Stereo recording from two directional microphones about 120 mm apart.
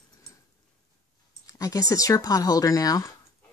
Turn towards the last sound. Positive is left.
turn(degrees=30)  # may be behind; listen again after turning